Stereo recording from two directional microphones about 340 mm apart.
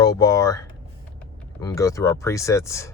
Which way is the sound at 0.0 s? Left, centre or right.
Centre.